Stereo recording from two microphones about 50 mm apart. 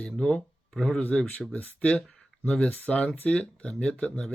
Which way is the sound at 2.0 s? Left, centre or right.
Centre.